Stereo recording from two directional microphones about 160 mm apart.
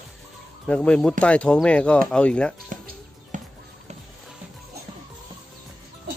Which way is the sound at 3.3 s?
55° right (ahead or behind).